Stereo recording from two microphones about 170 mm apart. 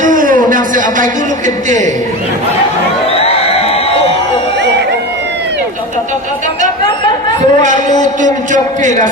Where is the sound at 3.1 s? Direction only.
35° left (ahead or behind).